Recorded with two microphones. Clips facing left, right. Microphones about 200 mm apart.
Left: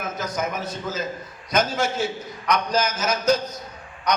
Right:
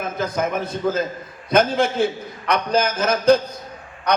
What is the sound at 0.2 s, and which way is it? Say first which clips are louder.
A man's voice: right 6 dB; 55° right (ahead or behind).